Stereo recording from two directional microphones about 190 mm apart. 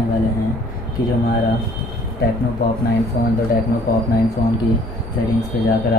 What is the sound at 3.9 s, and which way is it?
Speech, 55° left (ahead or behind).